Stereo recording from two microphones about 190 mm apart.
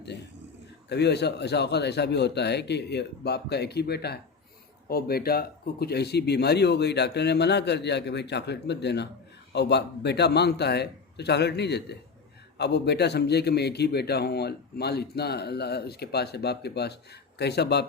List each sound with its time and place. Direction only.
0.9 s a man's voice: 60° left (ahead or behind)